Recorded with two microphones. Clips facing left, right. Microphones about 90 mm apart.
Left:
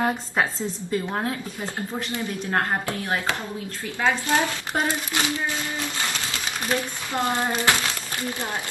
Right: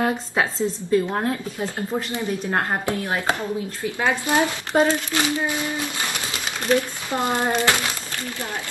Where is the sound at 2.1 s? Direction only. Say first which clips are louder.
Left 1 dB; 20° right (ahead or behind).